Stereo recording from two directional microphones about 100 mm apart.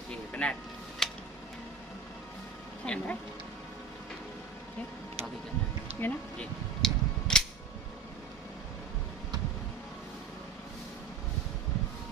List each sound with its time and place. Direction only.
0.3 s a sound: 10° left (ahead or behind)
2.8 s speech: 10° left (ahead or behind)
5.9 s speech: 20° left (ahead or behind)
6.8 s tick-tock: 5° left (ahead or behind)